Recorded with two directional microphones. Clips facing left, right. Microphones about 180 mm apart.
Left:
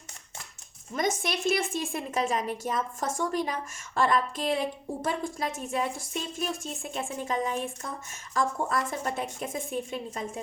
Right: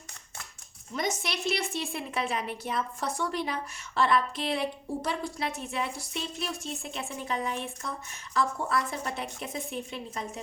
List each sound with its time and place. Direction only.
0.9 s a woman's voice: 50° left (ahead or behind)